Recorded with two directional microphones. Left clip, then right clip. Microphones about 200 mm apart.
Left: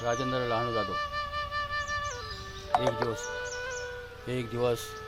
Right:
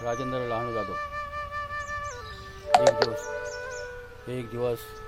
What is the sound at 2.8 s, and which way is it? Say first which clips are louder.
Music: right 8 dB; 45° right (ahead or behind).